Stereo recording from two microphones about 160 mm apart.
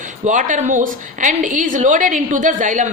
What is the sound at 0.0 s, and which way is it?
A woman's voice, 50° right (ahead or behind).